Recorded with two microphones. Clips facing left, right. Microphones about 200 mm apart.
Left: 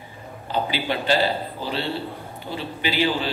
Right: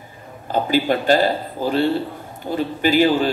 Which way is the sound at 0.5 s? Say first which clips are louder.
Right 7 dB; 45° right (ahead or behind).